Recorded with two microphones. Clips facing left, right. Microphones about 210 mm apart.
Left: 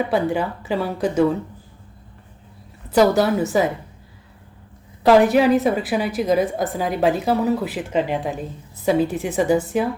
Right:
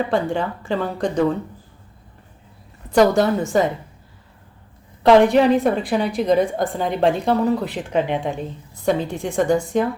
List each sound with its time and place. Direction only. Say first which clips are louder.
0.0 s speech: left 1 dB; 5° left (ahead or behind)
2.9 s a woman's voice: right 1 dB; 5° left (ahead or behind)
5.0 s a woman's voice: right 1 dB; 5° left (ahead or behind)